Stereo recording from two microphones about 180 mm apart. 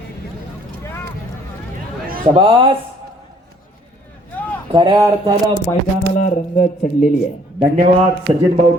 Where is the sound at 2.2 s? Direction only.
30° right (ahead or behind).